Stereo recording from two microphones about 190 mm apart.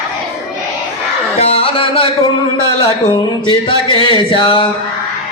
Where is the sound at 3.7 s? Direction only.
25° left (ahead or behind).